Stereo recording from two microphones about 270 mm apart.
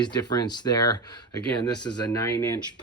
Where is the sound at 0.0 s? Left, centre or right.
Centre.